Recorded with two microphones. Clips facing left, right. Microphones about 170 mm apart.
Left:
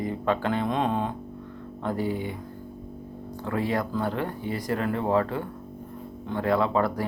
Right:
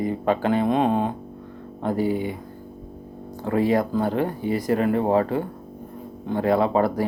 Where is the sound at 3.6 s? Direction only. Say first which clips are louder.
Right 7 dB; 15° right (ahead or behind).